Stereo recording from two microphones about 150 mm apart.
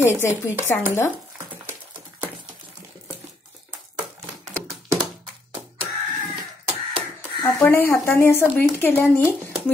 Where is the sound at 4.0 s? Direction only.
Centre (ahead or behind).